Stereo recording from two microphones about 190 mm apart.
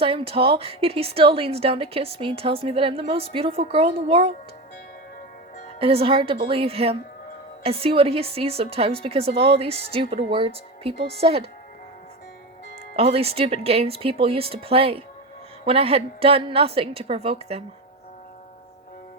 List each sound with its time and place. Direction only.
0.0 s a woman's voice: 30° right (ahead or behind)
5.8 s a woman's voice: 30° right (ahead or behind)
13.0 s a woman's voice: 30° right (ahead or behind)